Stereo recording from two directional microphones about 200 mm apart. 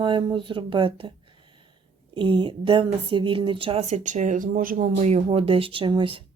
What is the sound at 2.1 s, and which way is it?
Speech, 25° right (ahead or behind).